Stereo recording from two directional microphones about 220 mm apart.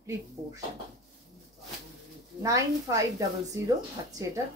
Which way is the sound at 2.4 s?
15° right (ahead or behind).